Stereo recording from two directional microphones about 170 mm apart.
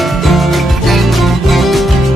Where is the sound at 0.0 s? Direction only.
Centre (ahead or behind).